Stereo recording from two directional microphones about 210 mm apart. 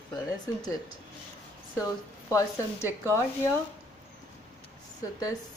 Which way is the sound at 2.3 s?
15° left (ahead or behind).